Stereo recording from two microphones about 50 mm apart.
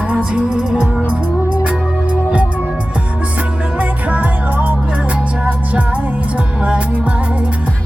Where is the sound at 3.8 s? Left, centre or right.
Right.